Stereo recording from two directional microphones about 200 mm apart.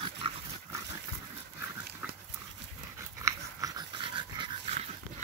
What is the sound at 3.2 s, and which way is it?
Dog, 20° right (ahead or behind).